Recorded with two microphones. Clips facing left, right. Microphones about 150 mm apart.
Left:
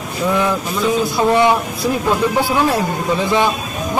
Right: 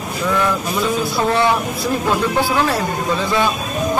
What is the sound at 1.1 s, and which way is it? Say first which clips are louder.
Speech: left 3 dB; 15° left (ahead or behind).